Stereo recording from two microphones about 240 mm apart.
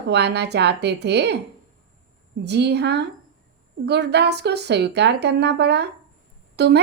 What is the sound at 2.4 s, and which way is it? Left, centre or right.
Speech, right.